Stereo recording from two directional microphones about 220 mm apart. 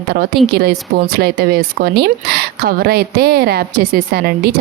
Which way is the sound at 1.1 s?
45° right (ahead or behind).